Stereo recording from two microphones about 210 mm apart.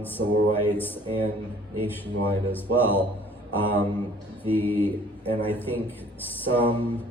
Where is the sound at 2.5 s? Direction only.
10° left (ahead or behind).